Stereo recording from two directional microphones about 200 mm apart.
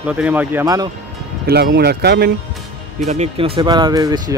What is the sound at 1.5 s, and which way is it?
Speech, 55° right (ahead or behind).